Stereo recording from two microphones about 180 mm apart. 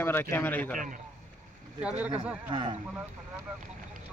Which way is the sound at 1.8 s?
5° right (ahead or behind).